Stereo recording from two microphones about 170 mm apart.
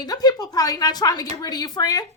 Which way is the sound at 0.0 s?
25° left (ahead or behind).